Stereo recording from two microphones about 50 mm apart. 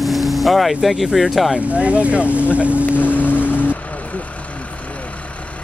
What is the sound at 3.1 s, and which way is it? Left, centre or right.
Music, left.